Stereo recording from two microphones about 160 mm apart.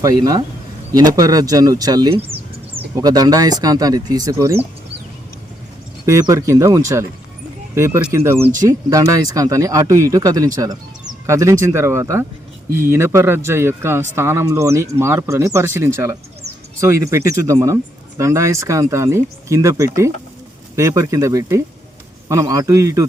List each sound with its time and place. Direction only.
0.0 s speech: 25° right (ahead or behind)
2.9 s speech: 25° right (ahead or behind)
6.1 s speech: 20° right (ahead or behind)